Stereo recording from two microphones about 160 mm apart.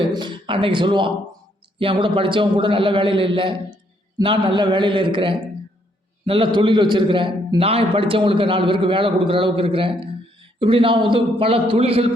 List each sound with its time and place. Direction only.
0.0 s a man's voice: 30° right (ahead or behind)